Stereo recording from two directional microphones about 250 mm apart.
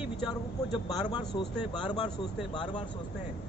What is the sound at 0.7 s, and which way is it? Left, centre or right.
A man's voice, centre.